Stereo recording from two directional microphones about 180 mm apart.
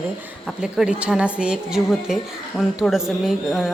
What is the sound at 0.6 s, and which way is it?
A woman's voice, 5° right (ahead or behind).